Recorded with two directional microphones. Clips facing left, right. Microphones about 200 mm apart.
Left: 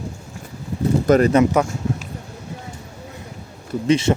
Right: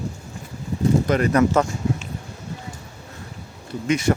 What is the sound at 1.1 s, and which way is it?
Speech, 40° left (ahead or behind).